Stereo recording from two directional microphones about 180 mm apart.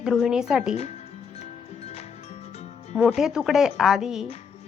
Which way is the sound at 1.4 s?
35° left (ahead or behind).